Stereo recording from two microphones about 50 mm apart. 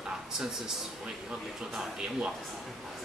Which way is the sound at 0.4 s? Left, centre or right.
Centre.